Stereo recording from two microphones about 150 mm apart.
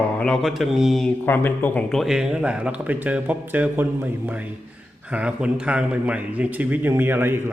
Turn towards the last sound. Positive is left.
turn(degrees=-15)  # may be behind; listen again after turning